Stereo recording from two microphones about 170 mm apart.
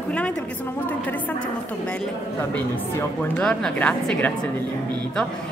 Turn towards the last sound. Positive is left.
turn(degrees=5)  # may be behind; listen again after turning